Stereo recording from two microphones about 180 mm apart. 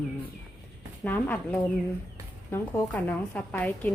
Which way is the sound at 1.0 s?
10° left (ahead or behind).